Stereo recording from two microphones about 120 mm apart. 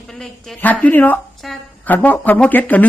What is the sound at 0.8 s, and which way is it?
Speech, 15° left (ahead or behind).